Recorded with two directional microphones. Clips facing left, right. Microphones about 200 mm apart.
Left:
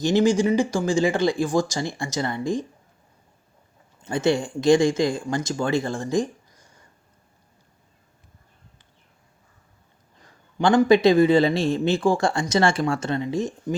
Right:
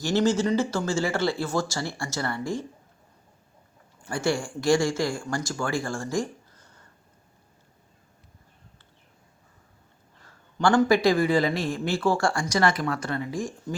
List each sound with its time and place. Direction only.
0.0 s speech: 15° left (ahead or behind)
4.0 s speech: 20° left (ahead or behind)
10.2 s speech: 20° left (ahead or behind)